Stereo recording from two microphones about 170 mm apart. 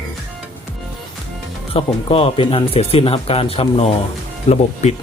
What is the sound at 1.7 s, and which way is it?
Speech, 35° left (ahead or behind).